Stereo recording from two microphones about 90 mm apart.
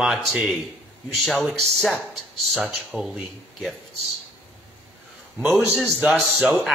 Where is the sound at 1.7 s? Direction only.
5° left (ahead or behind).